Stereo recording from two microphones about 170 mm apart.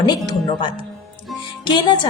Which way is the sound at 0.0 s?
25° left (ahead or behind).